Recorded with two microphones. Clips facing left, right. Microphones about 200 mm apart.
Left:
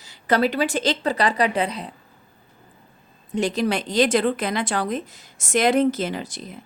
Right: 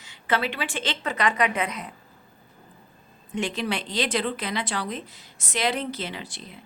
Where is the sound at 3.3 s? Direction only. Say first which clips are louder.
Left 6 dB; 40° left (ahead or behind).